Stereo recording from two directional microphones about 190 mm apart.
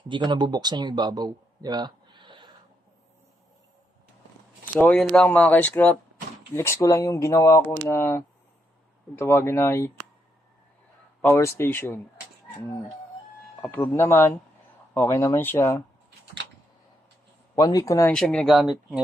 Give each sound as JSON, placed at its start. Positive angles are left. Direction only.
{"t": 0.1, "sound": "speech", "side_deg": -25}
{"t": 4.7, "sound": "speech", "side_deg": 10}
{"t": 11.2, "sound": "speech", "side_deg": 10}
{"t": 13.6, "sound": "speech", "side_deg": 10}
{"t": 17.5, "sound": "speech", "side_deg": 20}
{"t": 18.1, "sound": "speech", "side_deg": 5}